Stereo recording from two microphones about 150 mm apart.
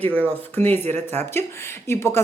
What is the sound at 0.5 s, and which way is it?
Speech, 10° left (ahead or behind).